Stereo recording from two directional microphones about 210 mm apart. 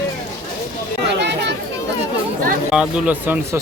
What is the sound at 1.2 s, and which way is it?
Chatter, 55° right (ahead or behind).